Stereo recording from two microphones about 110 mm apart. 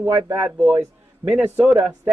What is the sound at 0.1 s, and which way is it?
Speech, 20° right (ahead or behind).